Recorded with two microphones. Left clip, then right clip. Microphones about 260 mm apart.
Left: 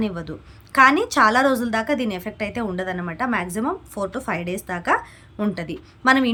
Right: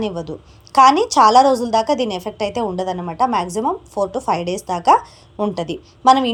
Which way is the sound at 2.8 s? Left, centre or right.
Left.